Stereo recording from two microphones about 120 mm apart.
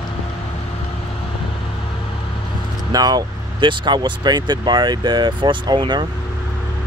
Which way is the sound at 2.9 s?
35° right (ahead or behind).